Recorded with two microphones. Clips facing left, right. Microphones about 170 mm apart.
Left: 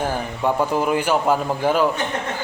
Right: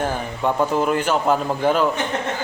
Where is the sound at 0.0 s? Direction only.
10° left (ahead or behind).